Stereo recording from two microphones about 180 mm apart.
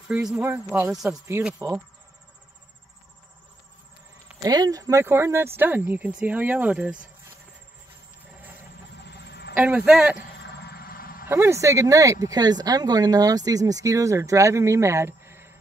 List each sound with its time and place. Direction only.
0.1 s speech: 5° right (ahead or behind)
1.2 s speech: 15° right (ahead or behind)
4.4 s speech: 20° right (ahead or behind)
9.0 s music: 70° left (ahead or behind)
9.5 s speech: 10° right (ahead or behind)
10.7 s dog: 55° left (ahead or behind)
11.2 s speech: 15° right (ahead or behind)